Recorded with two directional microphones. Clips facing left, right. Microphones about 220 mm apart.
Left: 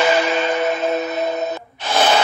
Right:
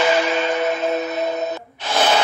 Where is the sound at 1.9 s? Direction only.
50° left (ahead or behind).